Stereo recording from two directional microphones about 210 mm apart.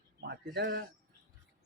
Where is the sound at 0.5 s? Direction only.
55° right (ahead or behind).